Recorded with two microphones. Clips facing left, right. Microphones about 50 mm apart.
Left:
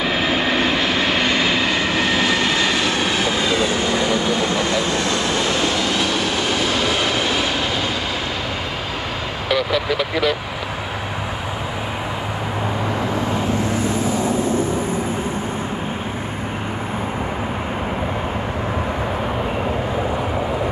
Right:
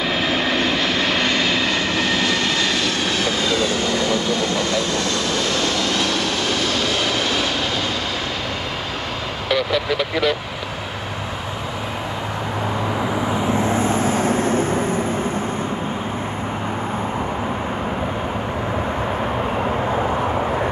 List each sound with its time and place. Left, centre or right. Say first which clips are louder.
0.0 s vehicle: left 1 dB; centre
9.5 s vehicle: even; centre
13.0 s vehicle: even; centre
13.5 s vehicle: right 2 dB; right